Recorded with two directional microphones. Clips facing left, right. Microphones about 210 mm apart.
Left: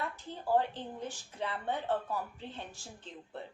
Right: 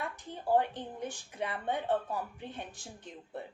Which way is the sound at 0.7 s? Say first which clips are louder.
Right 1 dB; 15° right (ahead or behind).